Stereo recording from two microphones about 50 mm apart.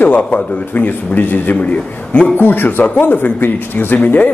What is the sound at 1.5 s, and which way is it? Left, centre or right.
A man's voice, left.